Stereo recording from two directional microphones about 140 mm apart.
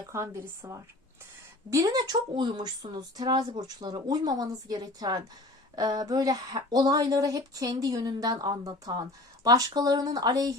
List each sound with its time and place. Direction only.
0.1 s speech: 20° right (ahead or behind)